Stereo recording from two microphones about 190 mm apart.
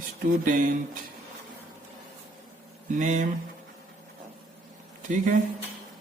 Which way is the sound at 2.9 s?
45° right (ahead or behind).